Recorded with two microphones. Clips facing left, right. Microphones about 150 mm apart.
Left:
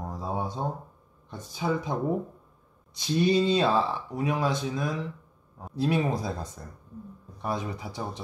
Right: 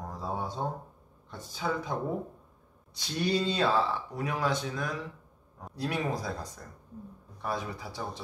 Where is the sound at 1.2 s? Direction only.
20° left (ahead or behind).